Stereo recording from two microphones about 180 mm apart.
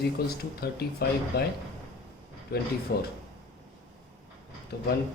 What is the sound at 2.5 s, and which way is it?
Speech, 60° left (ahead or behind).